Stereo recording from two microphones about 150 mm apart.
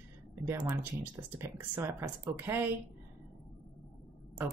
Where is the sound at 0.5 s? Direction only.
15° right (ahead or behind).